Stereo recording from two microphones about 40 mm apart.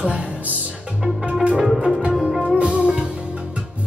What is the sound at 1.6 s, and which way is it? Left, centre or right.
Music, centre.